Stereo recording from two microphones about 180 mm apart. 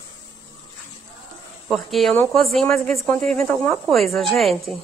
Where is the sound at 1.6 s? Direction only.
Centre (ahead or behind).